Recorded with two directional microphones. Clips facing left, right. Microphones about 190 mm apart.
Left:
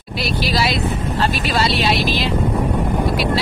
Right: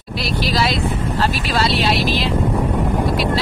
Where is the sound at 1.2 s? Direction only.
Centre (ahead or behind).